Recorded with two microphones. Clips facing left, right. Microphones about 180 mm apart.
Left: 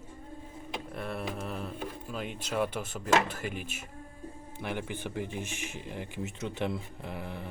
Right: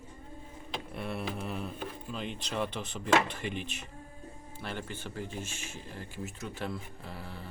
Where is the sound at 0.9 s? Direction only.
Centre (ahead or behind).